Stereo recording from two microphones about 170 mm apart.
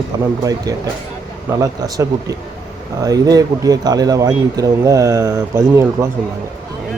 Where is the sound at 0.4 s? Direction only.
20° right (ahead or behind).